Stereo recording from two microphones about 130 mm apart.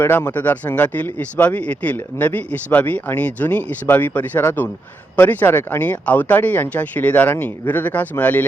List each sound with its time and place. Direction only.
0.0 s speech: 15° left (ahead or behind)